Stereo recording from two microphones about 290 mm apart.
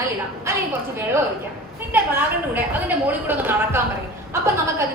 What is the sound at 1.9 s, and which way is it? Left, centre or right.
A woman's voice, centre.